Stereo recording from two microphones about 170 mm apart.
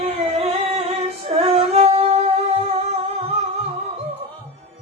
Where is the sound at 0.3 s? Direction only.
40° right (ahead or behind).